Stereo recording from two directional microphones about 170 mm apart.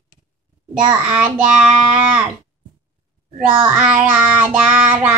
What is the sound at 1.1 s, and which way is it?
Child singing, 10° right (ahead or behind).